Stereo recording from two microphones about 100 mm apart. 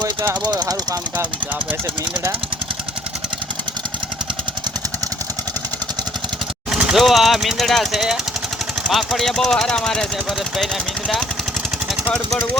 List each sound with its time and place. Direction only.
0.4 s speech: 40° right (ahead or behind)
6.7 s speech: 5° right (ahead or behind)
12.1 s speech: 10° left (ahead or behind)